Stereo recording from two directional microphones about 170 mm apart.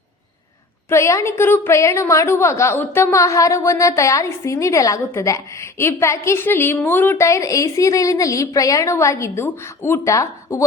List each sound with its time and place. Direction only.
0.9 s a woman's voice: 15° left (ahead or behind)